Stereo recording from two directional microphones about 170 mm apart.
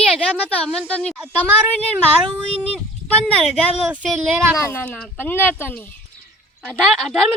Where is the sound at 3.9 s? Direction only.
5° right (ahead or behind).